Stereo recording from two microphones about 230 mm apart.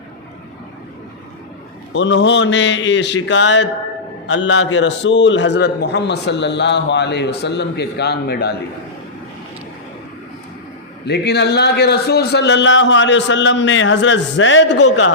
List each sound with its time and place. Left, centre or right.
1.9 s a man's voice: left
11.0 s a man's voice: left